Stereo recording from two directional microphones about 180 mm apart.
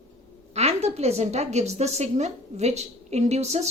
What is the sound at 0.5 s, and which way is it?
A woman's voice, 35° right (ahead or behind).